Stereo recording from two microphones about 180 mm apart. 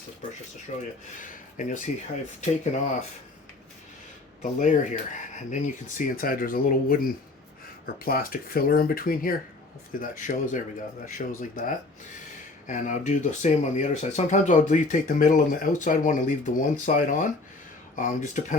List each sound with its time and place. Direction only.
0.7 s speech: 35° left (ahead or behind)
4.6 s speech: 45° left (ahead or behind)